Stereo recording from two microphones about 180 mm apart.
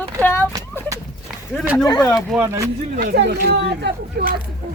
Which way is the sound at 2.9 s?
65° right (ahead or behind).